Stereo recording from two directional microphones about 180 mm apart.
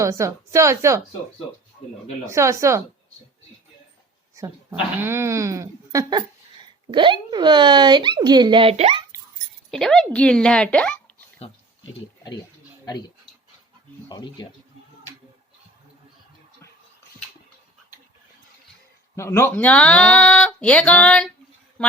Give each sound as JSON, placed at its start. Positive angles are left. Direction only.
{"t": 0.0, "sound": "a woman's voice", "side_deg": -15}
{"t": 2.3, "sound": "a woman's voice", "side_deg": -15}
{"t": 4.4, "sound": "speech", "side_deg": -15}
{"t": 9.7, "sound": "speech", "side_deg": 5}
{"t": 12.2, "sound": "speech", "side_deg": 20}
{"t": 14.1, "sound": "speech", "side_deg": 25}
{"t": 19.1, "sound": "speech", "side_deg": 15}